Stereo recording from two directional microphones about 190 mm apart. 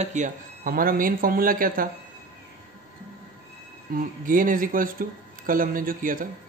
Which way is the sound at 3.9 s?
45° right (ahead or behind).